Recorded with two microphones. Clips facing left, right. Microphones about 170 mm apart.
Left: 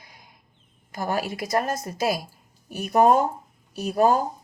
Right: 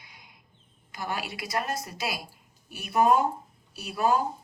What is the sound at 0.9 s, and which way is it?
Speech, 45° left (ahead or behind).